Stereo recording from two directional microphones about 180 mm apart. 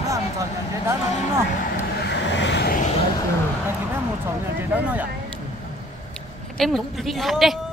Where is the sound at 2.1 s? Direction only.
80° left.